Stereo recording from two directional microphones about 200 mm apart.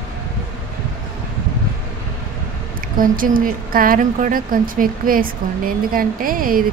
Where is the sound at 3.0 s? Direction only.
45° right (ahead or behind).